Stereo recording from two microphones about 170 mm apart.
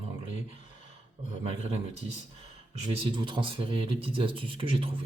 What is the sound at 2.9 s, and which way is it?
A man's voice, 30° right (ahead or behind).